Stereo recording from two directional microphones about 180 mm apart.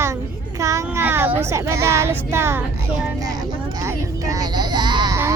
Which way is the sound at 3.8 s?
20° right (ahead or behind).